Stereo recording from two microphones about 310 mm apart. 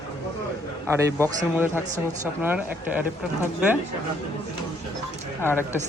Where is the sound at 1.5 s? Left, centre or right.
Centre.